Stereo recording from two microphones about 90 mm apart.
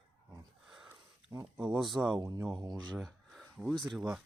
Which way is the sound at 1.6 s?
5° right (ahead or behind).